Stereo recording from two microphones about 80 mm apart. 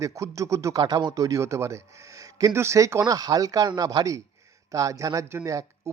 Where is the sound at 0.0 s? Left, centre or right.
Right.